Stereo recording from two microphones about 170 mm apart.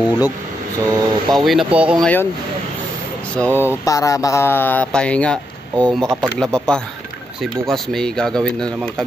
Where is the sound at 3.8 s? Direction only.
20° left (ahead or behind).